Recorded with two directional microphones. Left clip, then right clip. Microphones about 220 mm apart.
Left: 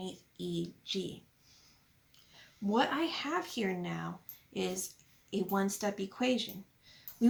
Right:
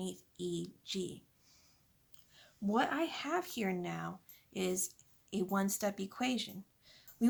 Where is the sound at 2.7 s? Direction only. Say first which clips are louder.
Left 3 dB; 50° right (ahead or behind).